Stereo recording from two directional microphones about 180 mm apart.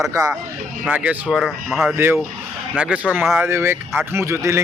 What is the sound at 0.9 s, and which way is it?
Speech, 10° right (ahead or behind).